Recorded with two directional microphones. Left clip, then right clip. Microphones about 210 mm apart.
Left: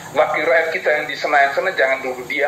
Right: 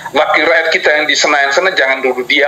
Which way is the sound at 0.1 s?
45° right (ahead or behind).